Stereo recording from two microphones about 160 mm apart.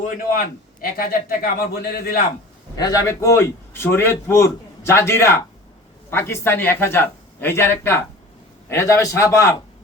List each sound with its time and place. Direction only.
0.0 s a man's voice: 60° left (ahead or behind)
2.7 s a man's voice: 25° left (ahead or behind)